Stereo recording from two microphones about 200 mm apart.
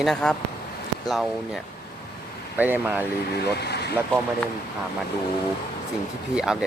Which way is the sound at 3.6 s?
55° left (ahead or behind).